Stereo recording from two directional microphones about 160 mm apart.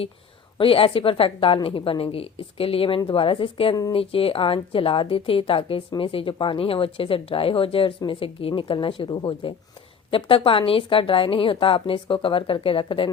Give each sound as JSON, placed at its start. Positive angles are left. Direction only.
{"t": 0.6, "sound": "a woman's voice", "side_deg": 35}